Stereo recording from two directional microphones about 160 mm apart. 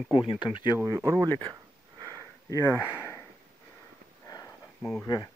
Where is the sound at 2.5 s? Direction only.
20° left (ahead or behind).